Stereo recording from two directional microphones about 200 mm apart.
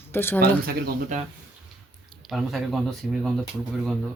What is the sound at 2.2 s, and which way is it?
Speech, centre (ahead or behind).